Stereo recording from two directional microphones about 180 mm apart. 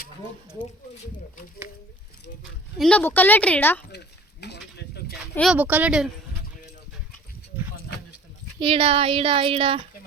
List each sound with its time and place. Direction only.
2.7 s speech: 5° left (ahead or behind)
3.9 s speech: 65° left (ahead or behind)
5.5 s a woman's voice: 10° right (ahead or behind)
8.5 s speech: 30° right (ahead or behind)